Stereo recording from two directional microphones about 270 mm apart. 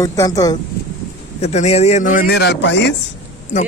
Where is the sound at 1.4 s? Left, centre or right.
Left.